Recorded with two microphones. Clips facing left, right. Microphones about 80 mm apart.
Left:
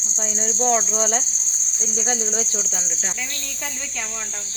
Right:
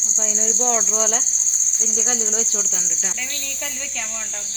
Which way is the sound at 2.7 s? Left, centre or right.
Left.